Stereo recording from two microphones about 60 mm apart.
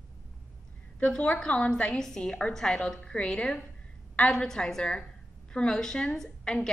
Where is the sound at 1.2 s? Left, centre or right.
Centre.